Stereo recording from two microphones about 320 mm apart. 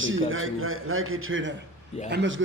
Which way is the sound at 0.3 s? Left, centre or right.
Right.